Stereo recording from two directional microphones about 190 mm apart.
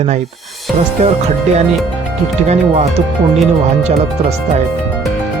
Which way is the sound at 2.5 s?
35° right (ahead or behind).